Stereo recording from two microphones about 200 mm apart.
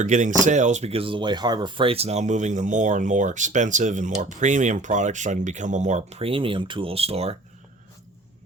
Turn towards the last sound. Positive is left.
turn(degrees=-30)  # may be behind; listen again after turning